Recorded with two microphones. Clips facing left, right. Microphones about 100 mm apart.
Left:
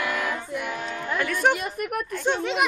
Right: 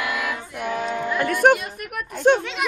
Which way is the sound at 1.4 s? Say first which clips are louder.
Right 6 dB; 50° right (ahead or behind).